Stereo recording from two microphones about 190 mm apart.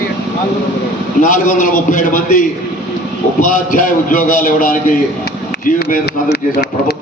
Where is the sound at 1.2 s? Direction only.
45° left (ahead or behind).